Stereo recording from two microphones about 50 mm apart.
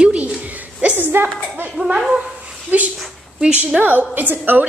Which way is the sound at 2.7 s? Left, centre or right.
Right.